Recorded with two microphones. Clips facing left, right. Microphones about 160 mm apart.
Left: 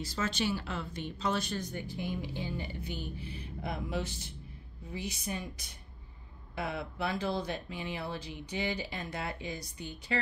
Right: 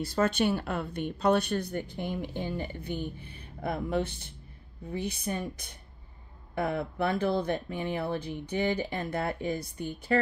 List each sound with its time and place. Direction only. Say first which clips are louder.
0.0 s speech: right 7 dB; 60° right (ahead or behind)